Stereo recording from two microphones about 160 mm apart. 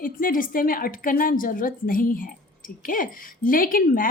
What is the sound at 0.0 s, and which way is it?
A woman's voice, 60° left (ahead or behind).